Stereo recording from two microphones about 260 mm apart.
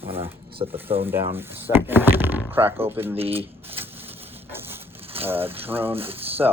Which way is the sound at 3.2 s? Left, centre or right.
Right.